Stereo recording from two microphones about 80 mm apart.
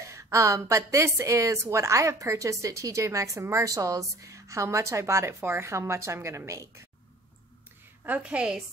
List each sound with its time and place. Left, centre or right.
0.0 s a woman's voice: right
8.2 s a woman's voice: centre